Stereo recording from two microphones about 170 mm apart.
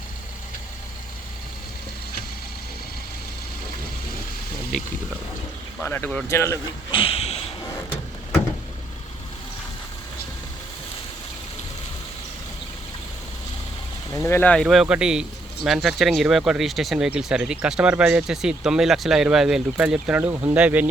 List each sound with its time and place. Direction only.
5.8 s speech: 10° left (ahead or behind)
6.9 s speech: 35° left (ahead or behind)
14.1 s speech: 15° left (ahead or behind); by 20.8 s 10° right (ahead or behind)